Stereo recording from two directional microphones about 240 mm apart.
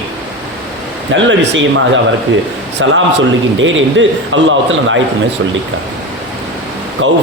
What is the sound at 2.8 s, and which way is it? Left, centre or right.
A man's voice, right.